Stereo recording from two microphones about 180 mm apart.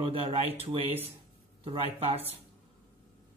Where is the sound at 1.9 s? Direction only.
35° right (ahead or behind).